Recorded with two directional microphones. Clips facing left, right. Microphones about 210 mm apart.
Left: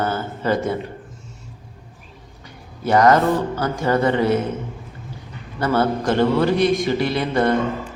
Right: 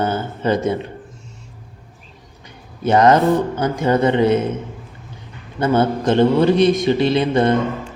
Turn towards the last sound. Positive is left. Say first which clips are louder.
# right 4 dB
turn(degrees=-20)  # may be behind; listen again after turning